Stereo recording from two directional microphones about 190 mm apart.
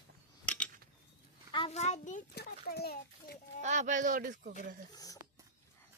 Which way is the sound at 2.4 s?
55° left (ahead or behind).